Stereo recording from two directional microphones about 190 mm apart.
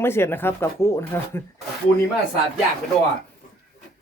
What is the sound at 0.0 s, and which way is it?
Speech, 10° left (ahead or behind).